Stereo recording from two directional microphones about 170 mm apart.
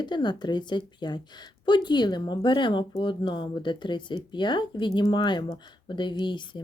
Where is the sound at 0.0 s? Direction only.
25° left (ahead or behind).